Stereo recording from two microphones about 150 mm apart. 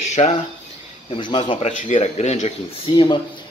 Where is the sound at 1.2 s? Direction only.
30° left (ahead or behind).